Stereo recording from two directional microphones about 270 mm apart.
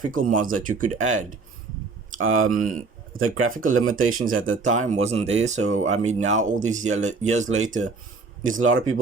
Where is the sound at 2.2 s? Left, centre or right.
Right.